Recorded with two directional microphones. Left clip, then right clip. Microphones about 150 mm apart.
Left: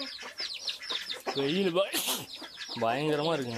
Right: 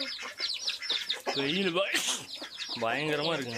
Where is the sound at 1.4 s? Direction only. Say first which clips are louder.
Left 3 dB; 35° left (ahead or behind).